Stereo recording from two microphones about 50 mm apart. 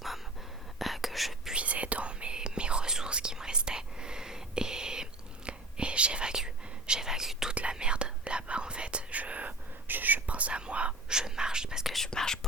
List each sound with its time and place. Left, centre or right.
0.8 s whispering: centre
1.5 s whispering: right; by 7.5 s centre
7.5 s whispering: right
11.1 s whispering: centre
12.0 s whispering: centre